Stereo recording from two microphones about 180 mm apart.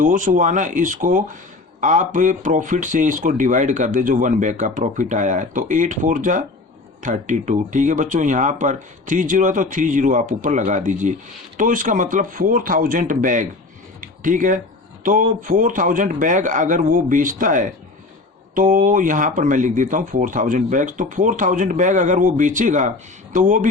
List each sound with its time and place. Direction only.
0.0 s speech: 45° right (ahead or behind)
14.0 s a sound: 45° right (ahead or behind)
15.0 s speech: 50° right (ahead or behind)